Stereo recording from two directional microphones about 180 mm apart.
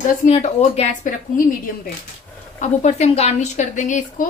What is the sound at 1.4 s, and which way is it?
Speech, 50° left (ahead or behind).